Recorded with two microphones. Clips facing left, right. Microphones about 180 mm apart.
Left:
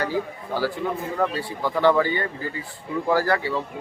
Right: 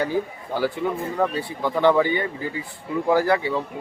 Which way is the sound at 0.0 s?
20° right (ahead or behind).